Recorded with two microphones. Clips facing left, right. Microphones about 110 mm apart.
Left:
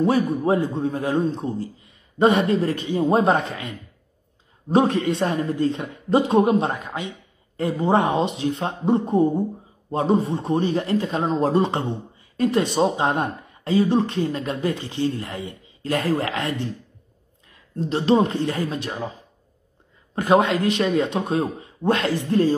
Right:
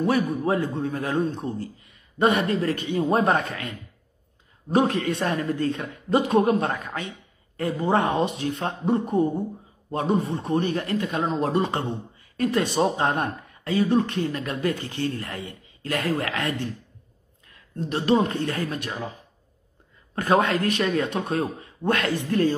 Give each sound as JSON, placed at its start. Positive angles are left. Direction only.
{"t": 0.0, "sound": "a man's voice", "side_deg": 25}
{"t": 17.8, "sound": "speech", "side_deg": 25}
{"t": 20.2, "sound": "speech", "side_deg": 20}